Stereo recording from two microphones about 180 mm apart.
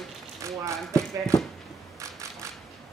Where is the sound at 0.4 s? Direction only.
15° right (ahead or behind).